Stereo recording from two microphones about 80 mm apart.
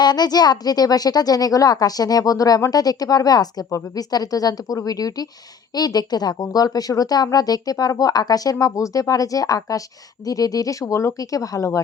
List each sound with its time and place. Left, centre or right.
0.0 s a woman's voice: left